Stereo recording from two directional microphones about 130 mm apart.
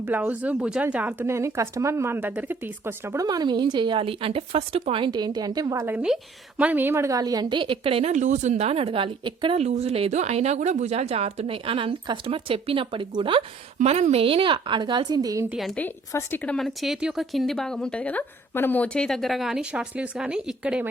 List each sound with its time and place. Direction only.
0.0 s speech: 15° right (ahead or behind)
3.2 s a woman's voice: 30° right (ahead or behind)
5.8 s a woman's voice: 15° right (ahead or behind); by 9.6 s 40° right (ahead or behind)
9.6 s speech: 55° right (ahead or behind)
13.7 s a woman's voice: 60° right (ahead or behind); by 15.4 s 25° right (ahead or behind)
15.4 s speech: centre (ahead or behind)
16.1 s speech: 15° left (ahead or behind); by 20.8 s 5° right (ahead or behind)